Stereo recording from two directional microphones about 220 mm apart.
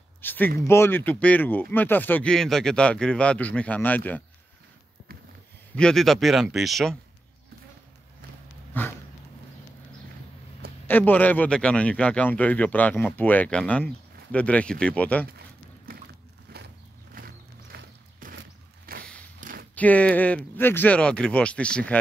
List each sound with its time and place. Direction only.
0.2 s speech: 10° left (ahead or behind)
5.8 s speech: centre (ahead or behind)
8.8 s speech: 10° left (ahead or behind)
10.9 s speech: 5° left (ahead or behind)
15.2 s a sound: 45° right (ahead or behind)
19.7 s speech: 5° left (ahead or behind)